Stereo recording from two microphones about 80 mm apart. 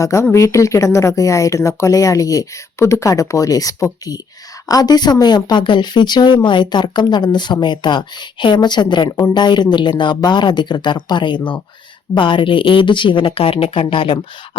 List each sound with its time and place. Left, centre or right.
0.0 s speech: left
4.7 s speech: left
12.1 s a woman's voice: left